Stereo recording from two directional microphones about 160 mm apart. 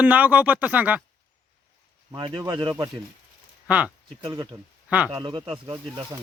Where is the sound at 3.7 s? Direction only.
10° right (ahead or behind).